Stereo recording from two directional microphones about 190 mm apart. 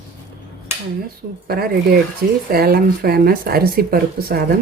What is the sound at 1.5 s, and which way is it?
Speech, 50° right (ahead or behind).